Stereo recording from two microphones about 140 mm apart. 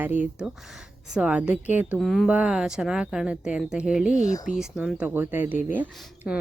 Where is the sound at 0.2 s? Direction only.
5° right (ahead or behind).